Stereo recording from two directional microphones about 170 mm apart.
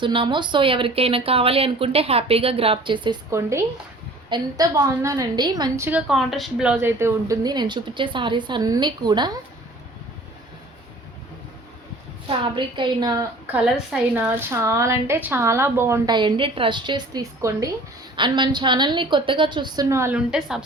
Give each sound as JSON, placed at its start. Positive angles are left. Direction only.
{"t": 0.0, "sound": "a woman's voice", "side_deg": -30}
{"t": 4.3, "sound": "speech", "side_deg": -20}
{"t": 6.1, "sound": "speech", "side_deg": 0}
{"t": 12.4, "sound": "speech", "side_deg": -30}
{"t": 13.5, "sound": "a woman's voice", "side_deg": -5}
{"t": 20.1, "sound": "speech", "side_deg": -5}